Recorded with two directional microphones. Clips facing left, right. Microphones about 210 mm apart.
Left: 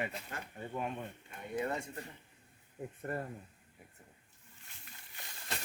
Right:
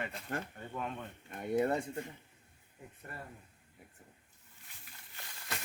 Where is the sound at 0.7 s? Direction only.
15° left (ahead or behind).